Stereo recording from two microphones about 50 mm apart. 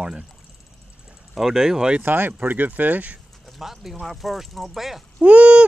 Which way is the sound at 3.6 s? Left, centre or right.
Centre.